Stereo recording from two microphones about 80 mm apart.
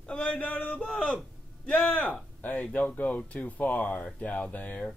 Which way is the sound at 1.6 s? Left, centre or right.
Centre.